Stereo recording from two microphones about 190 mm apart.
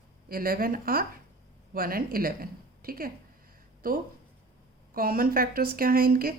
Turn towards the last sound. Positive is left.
turn(degrees=-50)  # may be behind; listen again after turning